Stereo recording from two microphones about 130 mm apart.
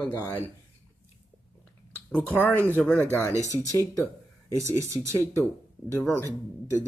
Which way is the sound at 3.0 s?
20° right (ahead or behind).